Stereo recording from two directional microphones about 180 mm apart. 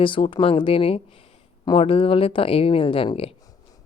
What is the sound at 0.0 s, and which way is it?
Speech, 30° left (ahead or behind).